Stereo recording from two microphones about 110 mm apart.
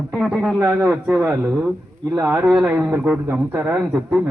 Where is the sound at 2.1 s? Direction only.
25° right (ahead or behind).